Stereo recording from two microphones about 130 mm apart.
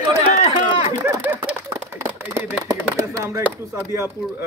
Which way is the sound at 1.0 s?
20° right (ahead or behind).